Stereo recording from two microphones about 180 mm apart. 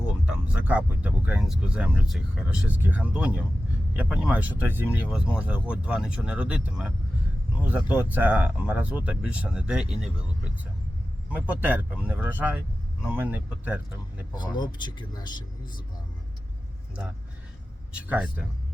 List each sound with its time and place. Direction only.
0.1 s speech: 5° right (ahead or behind)
14.3 s speech: 25° left (ahead or behind)
17.9 s speech: 10° right (ahead or behind)